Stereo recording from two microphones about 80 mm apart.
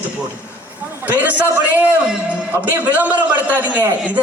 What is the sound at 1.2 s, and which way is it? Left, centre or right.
A man's voice, right.